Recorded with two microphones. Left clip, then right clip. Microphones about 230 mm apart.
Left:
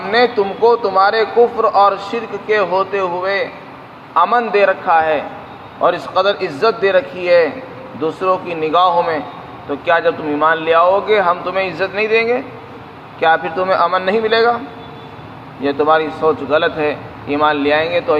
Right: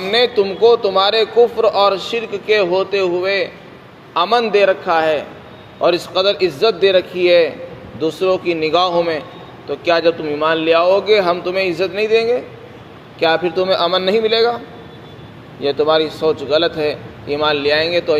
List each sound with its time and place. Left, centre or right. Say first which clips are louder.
1.0 s a man's voice: left 1 dB; right
15.6 s a man's voice: left 1 dB; right